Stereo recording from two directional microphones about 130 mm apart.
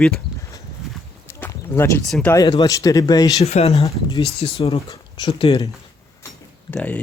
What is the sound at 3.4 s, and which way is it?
Speech, 55° left (ahead or behind).